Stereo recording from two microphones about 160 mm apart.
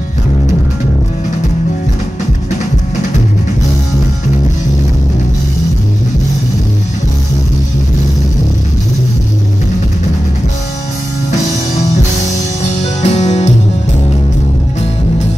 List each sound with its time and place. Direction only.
13.0 s music: 45° left (ahead or behind)